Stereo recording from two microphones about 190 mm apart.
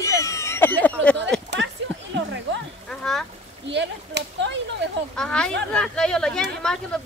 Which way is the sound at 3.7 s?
65° right (ahead or behind).